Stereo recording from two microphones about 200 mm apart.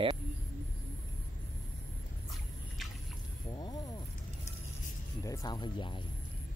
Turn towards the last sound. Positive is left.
turn(degrees=25)  # may be behind; listen again after turning